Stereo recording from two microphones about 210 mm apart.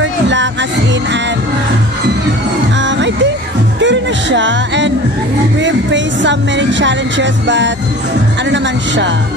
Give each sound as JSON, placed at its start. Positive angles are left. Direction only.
{"t": 0.0, "sound": "music", "side_deg": -60}
{"t": 3.8, "sound": "speech", "side_deg": -60}